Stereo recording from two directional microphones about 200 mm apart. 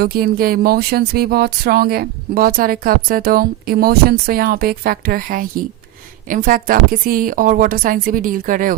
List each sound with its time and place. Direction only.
0.0 s speech: 50° right (ahead or behind)